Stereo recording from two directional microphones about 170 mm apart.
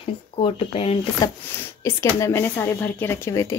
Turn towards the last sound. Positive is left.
turn(degrees=15)  # may be behind; listen again after turning